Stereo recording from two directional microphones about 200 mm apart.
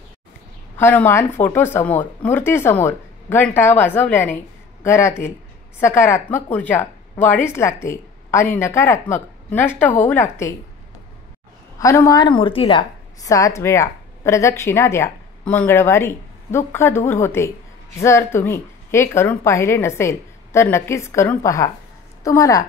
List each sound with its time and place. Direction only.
0.7 s a woman's voice: 10° left (ahead or behind)
11.8 s a woman's voice: 15° left (ahead or behind)
13.2 s a woman's voice: 15° left (ahead or behind)